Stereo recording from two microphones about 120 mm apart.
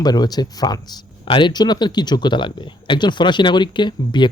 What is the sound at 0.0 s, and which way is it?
Speech, 35° left (ahead or behind).